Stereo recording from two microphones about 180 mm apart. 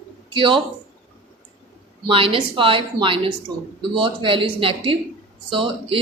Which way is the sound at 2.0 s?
30° right (ahead or behind).